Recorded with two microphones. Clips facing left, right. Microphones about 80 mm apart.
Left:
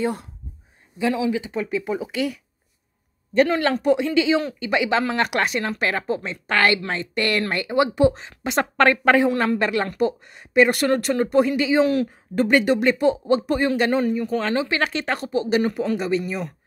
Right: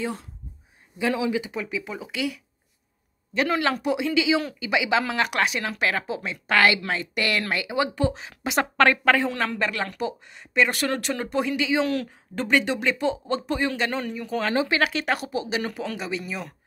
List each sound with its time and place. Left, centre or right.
0.0 s speech: centre
1.0 s speech: left
1.5 s speech: centre
3.3 s speech: centre
8.9 s speech: centre